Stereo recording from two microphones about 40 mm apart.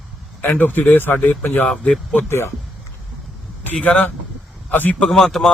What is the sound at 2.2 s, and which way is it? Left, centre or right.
Speech, left.